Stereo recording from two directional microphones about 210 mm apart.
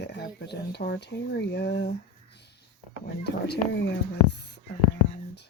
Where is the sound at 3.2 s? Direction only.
55° left (ahead or behind).